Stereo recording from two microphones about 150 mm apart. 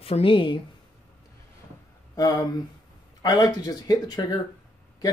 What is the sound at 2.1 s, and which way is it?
A man's voice, 25° left (ahead or behind).